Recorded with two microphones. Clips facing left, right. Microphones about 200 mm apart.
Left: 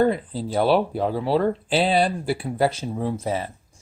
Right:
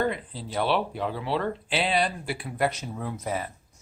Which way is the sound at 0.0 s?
35° left (ahead or behind).